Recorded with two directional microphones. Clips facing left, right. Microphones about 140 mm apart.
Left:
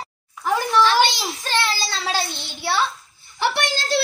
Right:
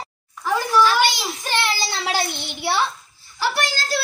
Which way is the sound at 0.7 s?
Centre (ahead or behind).